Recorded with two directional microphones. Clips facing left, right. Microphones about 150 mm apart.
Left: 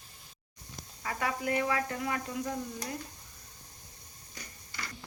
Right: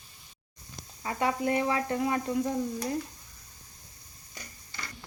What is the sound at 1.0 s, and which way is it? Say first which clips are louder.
Speech: right 5 dB; 25° right (ahead or behind).